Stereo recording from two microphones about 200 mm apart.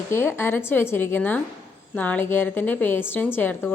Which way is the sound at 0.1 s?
10° left (ahead or behind).